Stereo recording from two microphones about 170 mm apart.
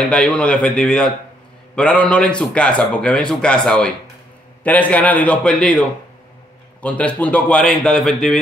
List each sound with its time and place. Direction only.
0.1 s a man's voice: 5° left (ahead or behind)